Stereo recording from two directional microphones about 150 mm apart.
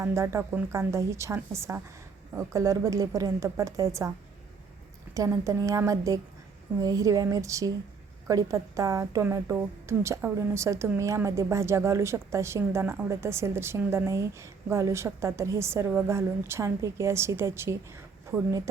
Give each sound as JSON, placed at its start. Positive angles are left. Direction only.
{"t": 0.0, "sound": "a woman's voice", "side_deg": -20}
{"t": 5.1, "sound": "a woman's voice", "side_deg": -20}